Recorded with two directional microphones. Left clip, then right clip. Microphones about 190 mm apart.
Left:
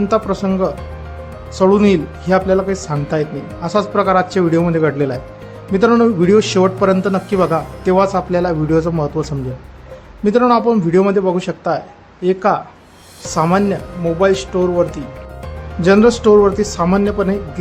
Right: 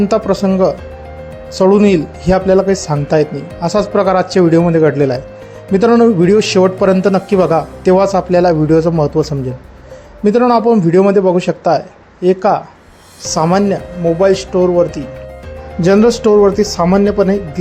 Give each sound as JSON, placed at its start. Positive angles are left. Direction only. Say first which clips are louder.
{"t": 0.0, "sound": "speech", "louder": "right 3 dB", "side_deg": -15}